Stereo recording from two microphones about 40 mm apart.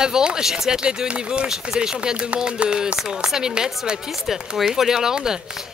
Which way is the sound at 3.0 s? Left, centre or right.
Centre.